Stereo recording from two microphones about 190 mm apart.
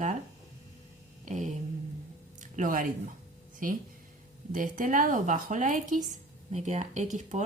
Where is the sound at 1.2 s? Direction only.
40° right (ahead or behind).